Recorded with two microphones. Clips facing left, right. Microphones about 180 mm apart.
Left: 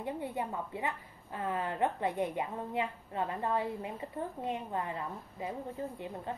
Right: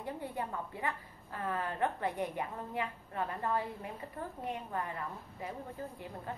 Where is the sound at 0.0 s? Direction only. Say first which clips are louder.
Left 3 dB; 25° left (ahead or behind).